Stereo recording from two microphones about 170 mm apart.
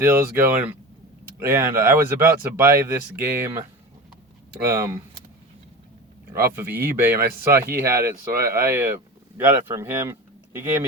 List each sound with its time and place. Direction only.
0.0 s speech: 15° right (ahead or behind)
4.5 s speech: 15° right (ahead or behind)
6.6 s speech: 10° right (ahead or behind)